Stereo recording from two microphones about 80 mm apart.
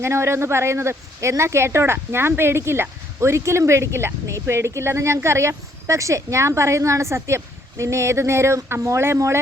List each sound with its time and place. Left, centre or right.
0.0 s speech: right